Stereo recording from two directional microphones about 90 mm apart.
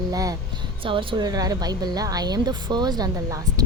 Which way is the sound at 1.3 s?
45° right (ahead or behind).